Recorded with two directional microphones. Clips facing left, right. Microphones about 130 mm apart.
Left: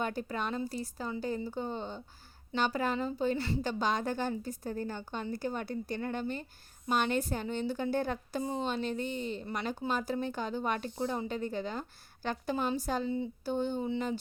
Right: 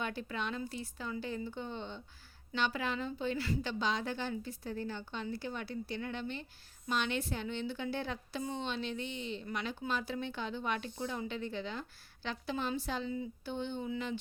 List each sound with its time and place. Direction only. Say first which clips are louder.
0.0 s a woman's voice: left 4 dB; 40° left (ahead or behind)